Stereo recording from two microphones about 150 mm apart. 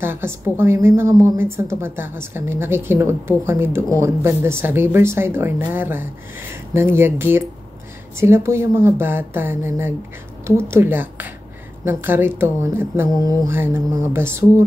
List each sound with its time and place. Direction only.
0.0 s a woman's voice: 15° right (ahead or behind)